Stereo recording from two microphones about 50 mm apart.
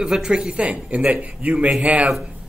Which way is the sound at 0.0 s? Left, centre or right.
Centre.